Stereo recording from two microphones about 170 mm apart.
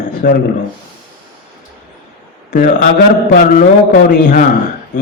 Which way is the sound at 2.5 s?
50° left (ahead or behind).